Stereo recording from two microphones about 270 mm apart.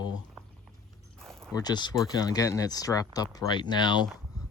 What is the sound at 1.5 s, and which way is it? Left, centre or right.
Speech, centre.